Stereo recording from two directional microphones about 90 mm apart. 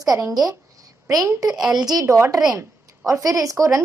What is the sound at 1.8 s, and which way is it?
A woman's voice, 45° right (ahead or behind).